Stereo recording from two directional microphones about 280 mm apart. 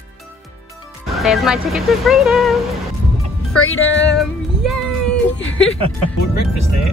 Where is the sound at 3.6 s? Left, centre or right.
Left.